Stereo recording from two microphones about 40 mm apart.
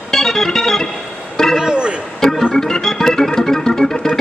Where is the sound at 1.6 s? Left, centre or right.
Right.